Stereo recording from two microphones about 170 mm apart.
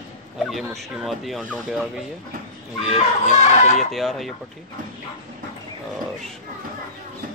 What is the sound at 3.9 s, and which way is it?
Speech, centre (ahead or behind).